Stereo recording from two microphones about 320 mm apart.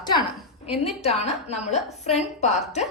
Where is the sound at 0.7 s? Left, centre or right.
Centre.